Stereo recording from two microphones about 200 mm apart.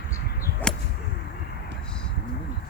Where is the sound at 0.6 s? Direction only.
10° left (ahead or behind).